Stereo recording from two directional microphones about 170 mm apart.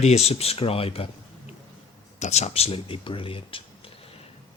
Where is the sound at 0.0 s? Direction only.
40° left (ahead or behind).